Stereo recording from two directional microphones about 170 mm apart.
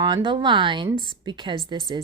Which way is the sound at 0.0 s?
30° right (ahead or behind).